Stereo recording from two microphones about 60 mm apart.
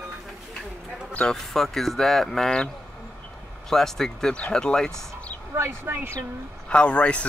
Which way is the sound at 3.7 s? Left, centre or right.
Centre.